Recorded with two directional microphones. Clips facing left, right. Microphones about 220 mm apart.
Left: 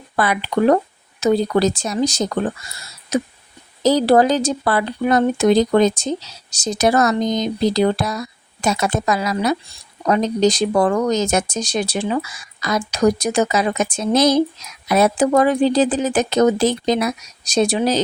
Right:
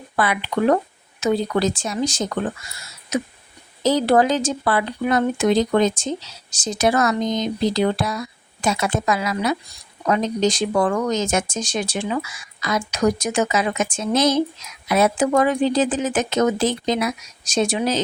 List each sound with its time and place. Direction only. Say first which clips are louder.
0.2 s speech: left 3 dB; 40° left (ahead or behind)